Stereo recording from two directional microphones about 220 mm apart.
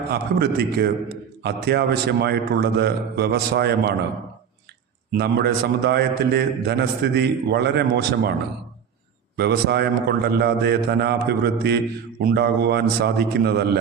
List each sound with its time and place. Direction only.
0.1 s a man's voice: 45° right (ahead or behind)
5.1 s a man's voice: 45° right (ahead or behind)
9.3 s a man's voice: 45° right (ahead or behind)